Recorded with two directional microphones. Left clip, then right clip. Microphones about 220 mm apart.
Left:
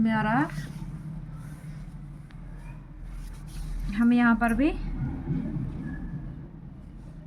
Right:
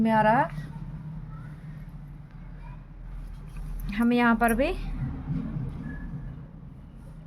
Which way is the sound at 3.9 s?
50° right (ahead or behind).